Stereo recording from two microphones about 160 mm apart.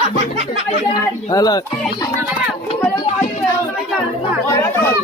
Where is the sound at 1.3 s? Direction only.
25° left (ahead or behind).